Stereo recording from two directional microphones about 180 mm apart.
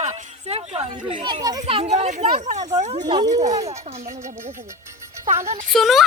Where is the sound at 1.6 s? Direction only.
35° right (ahead or behind).